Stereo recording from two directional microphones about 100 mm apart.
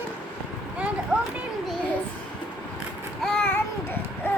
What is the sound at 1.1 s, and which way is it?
Children playing, 10° right (ahead or behind).